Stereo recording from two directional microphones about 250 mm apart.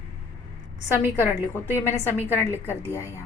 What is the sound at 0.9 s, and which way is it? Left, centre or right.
Speech, centre.